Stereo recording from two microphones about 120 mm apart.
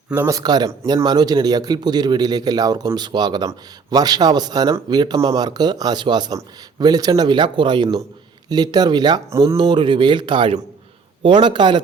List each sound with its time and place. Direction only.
0.3 s a man's voice: 30° right (ahead or behind)
9.3 s speech: 25° right (ahead or behind)
9.6 s a man's voice: 40° right (ahead or behind)